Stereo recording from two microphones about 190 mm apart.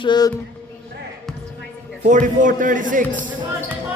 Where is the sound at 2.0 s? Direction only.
40° right (ahead or behind).